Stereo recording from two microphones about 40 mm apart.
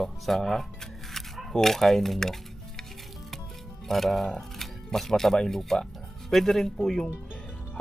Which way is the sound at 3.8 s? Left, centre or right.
Centre.